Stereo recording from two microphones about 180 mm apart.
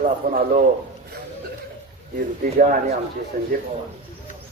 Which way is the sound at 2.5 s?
50° right (ahead or behind).